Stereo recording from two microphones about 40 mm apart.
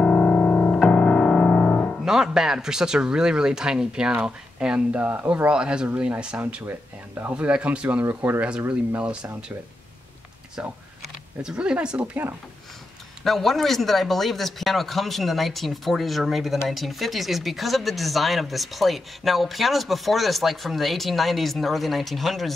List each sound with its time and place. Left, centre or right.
0.0 s music: left
2.0 s speech: centre
6.7 s speech: right
7.3 s speech: right
8.0 s speech: right
10.6 s speech: right
11.5 s speech: right
13.2 s speech: centre